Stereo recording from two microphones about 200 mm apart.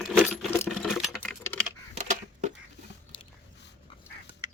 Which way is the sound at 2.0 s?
35° right (ahead or behind).